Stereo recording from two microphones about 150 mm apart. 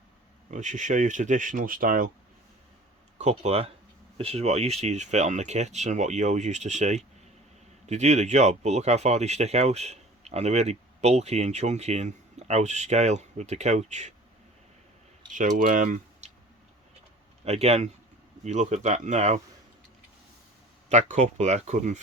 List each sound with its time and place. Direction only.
0.5 s speech: 55° right (ahead or behind)
3.2 s speech: 45° right (ahead or behind)
15.3 s speech: 60° right (ahead or behind)
17.4 s speech: 45° right (ahead or behind)
20.9 s speech: 50° right (ahead or behind)